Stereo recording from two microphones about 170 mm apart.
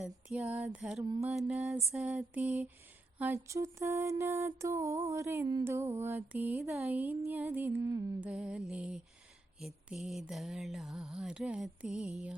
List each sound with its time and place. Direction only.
0.0 s mantra: 5° right (ahead or behind); by 8.0 s 20° right (ahead or behind)
8.2 s mantra: 5° right (ahead or behind)